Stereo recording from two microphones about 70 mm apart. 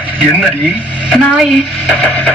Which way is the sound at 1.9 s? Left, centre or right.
Left.